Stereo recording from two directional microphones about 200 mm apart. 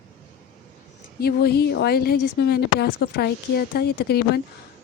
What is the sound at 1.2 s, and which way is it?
Speech, 55° left (ahead or behind).